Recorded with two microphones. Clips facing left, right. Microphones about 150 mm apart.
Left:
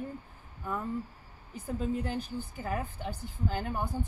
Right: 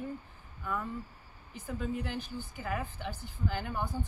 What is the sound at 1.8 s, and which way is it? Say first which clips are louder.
A woman's voice: left 3 dB; 40° left (ahead or behind).